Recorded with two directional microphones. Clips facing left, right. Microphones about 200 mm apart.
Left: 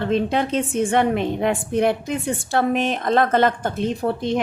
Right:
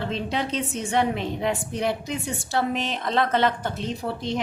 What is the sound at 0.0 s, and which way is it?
A woman's voice, 55° left (ahead or behind).